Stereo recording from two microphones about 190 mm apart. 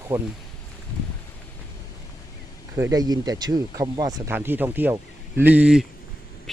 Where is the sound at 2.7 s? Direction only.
15° right (ahead or behind).